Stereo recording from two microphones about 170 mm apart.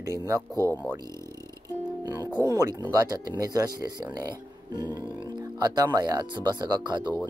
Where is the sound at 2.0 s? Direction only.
20° right (ahead or behind).